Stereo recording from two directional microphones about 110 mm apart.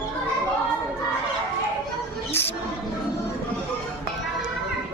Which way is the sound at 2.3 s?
20° left (ahead or behind).